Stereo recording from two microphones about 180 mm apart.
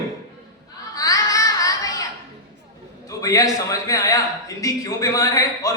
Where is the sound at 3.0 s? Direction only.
20° left (ahead or behind).